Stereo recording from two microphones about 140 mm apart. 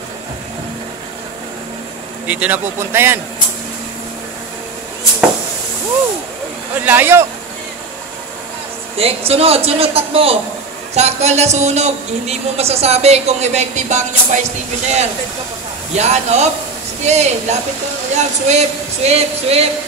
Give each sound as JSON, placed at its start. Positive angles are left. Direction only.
{"t": 2.2, "sound": "a man's voice", "side_deg": -10}
{"t": 6.8, "sound": "a man's voice", "side_deg": -15}
{"t": 8.9, "sound": "a woman's voice", "side_deg": -45}
{"t": 15.9, "sound": "a woman's voice", "side_deg": -50}